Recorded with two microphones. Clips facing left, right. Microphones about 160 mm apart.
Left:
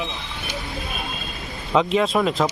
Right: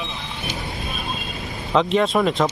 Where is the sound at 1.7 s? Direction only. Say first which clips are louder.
Right 1 dB; centre (ahead or behind).